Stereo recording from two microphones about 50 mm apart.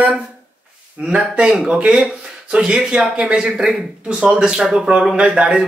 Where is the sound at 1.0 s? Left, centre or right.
Centre.